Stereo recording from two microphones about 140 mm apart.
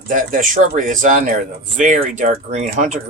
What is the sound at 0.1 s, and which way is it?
Speech, 70° right (ahead or behind).